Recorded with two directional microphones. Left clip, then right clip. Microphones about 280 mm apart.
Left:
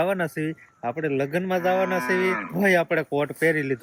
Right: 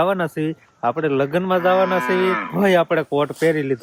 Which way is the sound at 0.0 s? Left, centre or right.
Centre.